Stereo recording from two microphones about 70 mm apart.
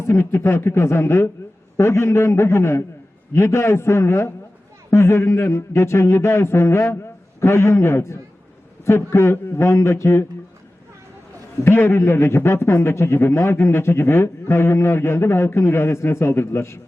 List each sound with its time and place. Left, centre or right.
0.0 s a man's voice: left
11.6 s a man's voice: left